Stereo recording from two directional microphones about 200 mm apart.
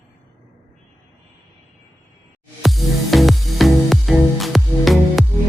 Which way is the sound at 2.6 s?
Centre (ahead or behind).